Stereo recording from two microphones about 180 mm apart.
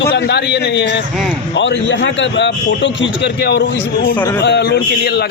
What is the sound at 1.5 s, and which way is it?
A man's voice, 90° left.